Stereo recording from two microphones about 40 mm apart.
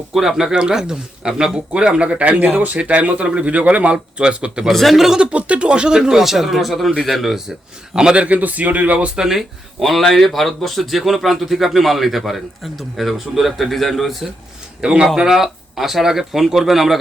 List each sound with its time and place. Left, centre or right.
0.1 s speech: centre; by 3.9 s right
3.9 s speech: right
4.7 s a man's voice: centre
4.9 s speech: centre
5.2 s a man's voice: right; by 7.3 s centre
8.1 s speech: right
9.1 s speech: centre
9.8 s a man's voice: centre
14.8 s a man's voice: right
15.1 s speech: centre